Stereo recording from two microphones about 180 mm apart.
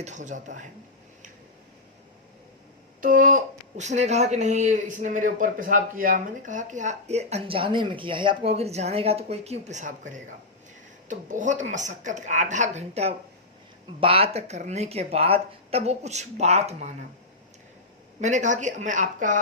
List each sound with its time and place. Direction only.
0.0 s speech: 40° right (ahead or behind)
3.0 s speech: 50° right (ahead or behind)
18.2 s speech: 40° right (ahead or behind)